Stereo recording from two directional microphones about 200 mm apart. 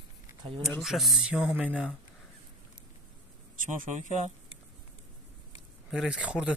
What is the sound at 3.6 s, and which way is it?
Speech, 40° right (ahead or behind).